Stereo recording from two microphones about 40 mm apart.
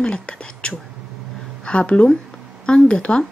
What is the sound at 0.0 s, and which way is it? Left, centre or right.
A woman's voice, left.